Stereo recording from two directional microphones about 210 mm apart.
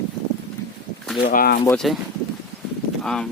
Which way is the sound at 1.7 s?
Centre (ahead or behind).